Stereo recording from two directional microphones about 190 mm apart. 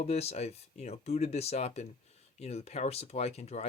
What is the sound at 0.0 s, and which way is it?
Speech, 35° left (ahead or behind).